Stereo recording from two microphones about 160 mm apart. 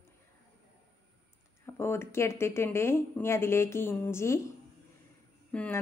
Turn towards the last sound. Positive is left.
turn(degrees=10)  # may be behind; listen again after turning